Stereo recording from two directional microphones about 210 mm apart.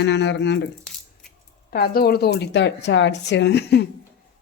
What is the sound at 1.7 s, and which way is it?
A woman's voice, 45° left (ahead or behind).